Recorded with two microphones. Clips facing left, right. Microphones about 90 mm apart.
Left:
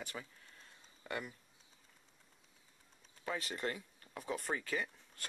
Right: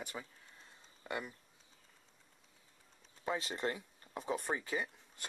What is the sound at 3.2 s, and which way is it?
Speech, 20° right (ahead or behind).